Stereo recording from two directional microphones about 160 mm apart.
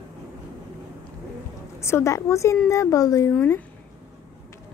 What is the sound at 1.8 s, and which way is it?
A child's voice, 15° left (ahead or behind).